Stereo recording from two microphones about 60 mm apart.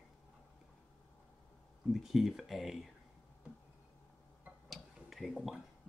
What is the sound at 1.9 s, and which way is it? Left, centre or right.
Speech, centre.